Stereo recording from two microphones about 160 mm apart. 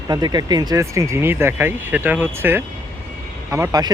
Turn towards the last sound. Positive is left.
turn(degrees=-20)  # may be behind; listen again after turning